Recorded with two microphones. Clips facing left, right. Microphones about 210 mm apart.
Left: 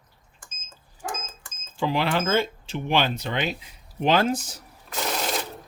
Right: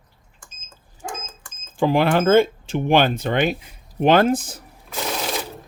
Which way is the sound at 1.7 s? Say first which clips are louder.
Right 7 dB; 50° right (ahead or behind).